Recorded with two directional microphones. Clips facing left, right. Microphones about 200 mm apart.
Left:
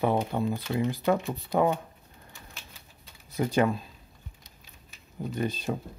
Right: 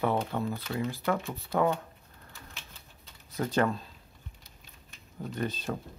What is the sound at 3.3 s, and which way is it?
Speech, 10° left (ahead or behind).